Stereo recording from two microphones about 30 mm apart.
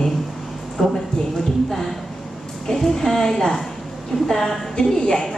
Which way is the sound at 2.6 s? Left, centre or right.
Centre.